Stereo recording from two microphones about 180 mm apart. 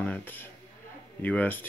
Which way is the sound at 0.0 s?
10° left (ahead or behind).